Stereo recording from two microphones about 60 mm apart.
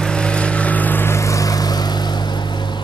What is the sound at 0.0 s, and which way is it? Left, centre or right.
Vehicle, centre.